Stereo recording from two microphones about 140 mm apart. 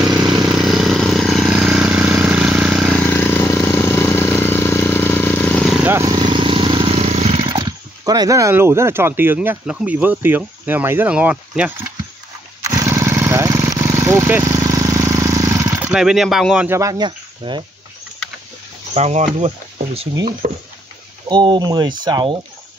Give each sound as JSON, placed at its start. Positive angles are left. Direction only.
{"t": 0.2, "sound": "vehicle", "side_deg": -30}
{"t": 0.6, "sound": "vehicle", "side_deg": 0}
{"t": 3.1, "sound": "vehicle", "side_deg": 15}
{"t": 5.8, "sound": "vehicle", "side_deg": -15}
{"t": 6.1, "sound": "vehicle", "side_deg": -35}
{"t": 8.0, "sound": "speech", "side_deg": -25}
{"t": 12.6, "sound": "lawn mower", "side_deg": -25}
{"t": 15.9, "sound": "speech", "side_deg": -5}
{"t": 16.6, "sound": "speech", "side_deg": -20}
{"t": 16.9, "sound": "speech", "side_deg": -30}
{"t": 18.9, "sound": "speech", "side_deg": -50}
{"t": 21.3, "sound": "speech", "side_deg": -30}